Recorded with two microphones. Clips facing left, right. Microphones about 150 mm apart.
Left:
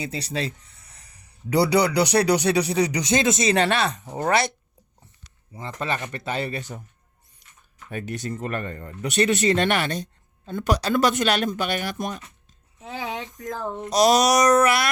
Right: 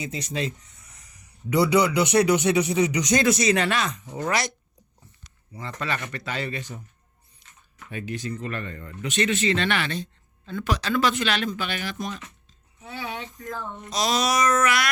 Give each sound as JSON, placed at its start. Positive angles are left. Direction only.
{"t": 0.0, "sound": "a man's voice", "side_deg": 35}
{"t": 5.5, "sound": "speech", "side_deg": 25}
{"t": 7.9, "sound": "speech", "side_deg": 45}
{"t": 13.1, "sound": "speech", "side_deg": 20}
{"t": 13.5, "sound": "a man's voice", "side_deg": 40}